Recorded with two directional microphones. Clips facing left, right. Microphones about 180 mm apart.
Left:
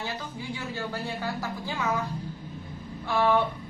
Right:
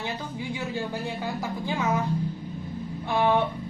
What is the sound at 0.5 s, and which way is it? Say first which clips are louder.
A woman's voice: right 3 dB; 15° right (ahead or behind).